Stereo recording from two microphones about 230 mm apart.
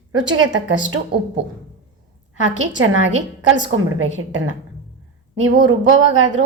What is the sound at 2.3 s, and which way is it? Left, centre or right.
A woman's voice, right.